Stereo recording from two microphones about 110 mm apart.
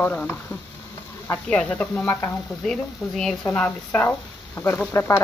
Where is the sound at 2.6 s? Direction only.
5° left (ahead or behind).